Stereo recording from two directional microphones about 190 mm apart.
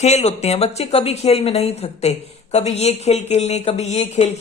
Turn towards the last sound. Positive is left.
turn(degrees=35)  # may be behind; listen again after turning